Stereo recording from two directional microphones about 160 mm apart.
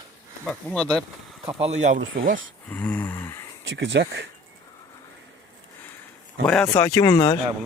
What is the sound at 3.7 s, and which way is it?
Speech, 90° right.